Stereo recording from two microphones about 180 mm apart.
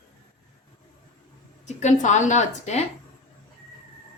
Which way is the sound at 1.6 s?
40° left (ahead or behind).